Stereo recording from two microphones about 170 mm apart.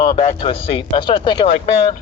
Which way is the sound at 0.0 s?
35° left (ahead or behind).